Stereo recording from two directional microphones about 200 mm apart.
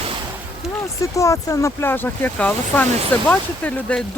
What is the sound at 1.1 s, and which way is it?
Speech, 15° left (ahead or behind).